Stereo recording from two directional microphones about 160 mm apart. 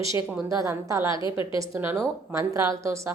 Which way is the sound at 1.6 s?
15° right (ahead or behind).